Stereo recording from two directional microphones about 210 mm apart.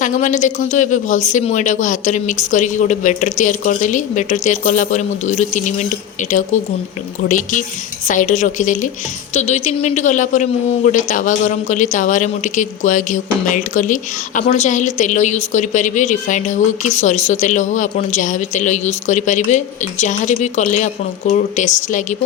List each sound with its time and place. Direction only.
0.0 s a woman's voice: 35° left (ahead or behind)